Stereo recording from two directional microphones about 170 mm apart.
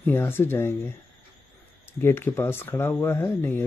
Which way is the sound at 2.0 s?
15° left (ahead or behind).